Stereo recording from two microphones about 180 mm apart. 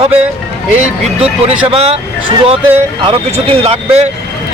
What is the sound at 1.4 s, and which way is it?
Speech, 35° right (ahead or behind).